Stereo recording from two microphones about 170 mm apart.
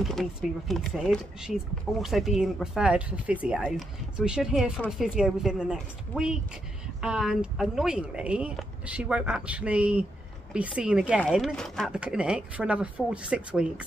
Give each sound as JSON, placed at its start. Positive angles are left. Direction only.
{"t": 0.0, "sound": "speech", "side_deg": 0}